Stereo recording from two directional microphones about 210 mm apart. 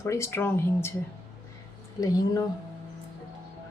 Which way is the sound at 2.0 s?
15° left (ahead or behind).